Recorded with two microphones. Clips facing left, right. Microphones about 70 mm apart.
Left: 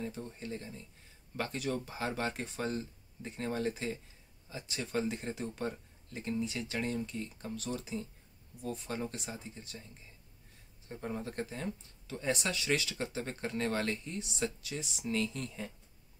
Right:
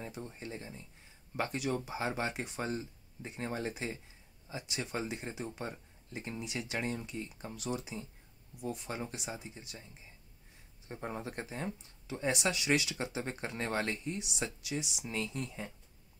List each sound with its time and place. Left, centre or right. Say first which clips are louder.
0.0 s speech: left 2 dB; right
5.0 s speech: left 2 dB; centre
6.1 s speech: left 4 dB; centre
10.9 s speech: left 1 dB; right
14.1 s speech: left 2 dB; centre
15.3 s speech: right 1 dB; centre